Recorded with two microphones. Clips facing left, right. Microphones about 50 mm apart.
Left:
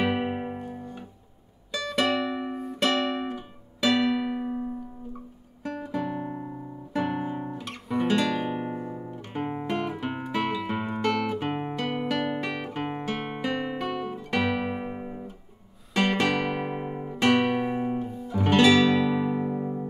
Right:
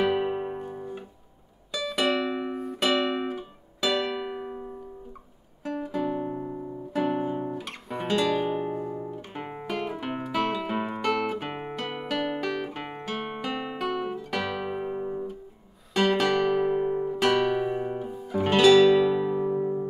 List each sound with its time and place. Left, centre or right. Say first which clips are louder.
0.0 s music: right 2 dB; centre
0.5 s music: right 2 dB; centre
5.6 s guitar: right 2 dB; centre
8.7 s music: right 2 dB; centre
9.6 s guitar: right 1 dB; centre
11.5 s music: left 4 dB; centre
12.9 s guitar: left 2 dB; centre
14.4 s music: left 4 dB; centre
16.0 s guitar: right 2 dB; centre
16.4 s guitar: right 6 dB; left
17.9 s guitar: even; centre
19.2 s music: right 1 dB; centre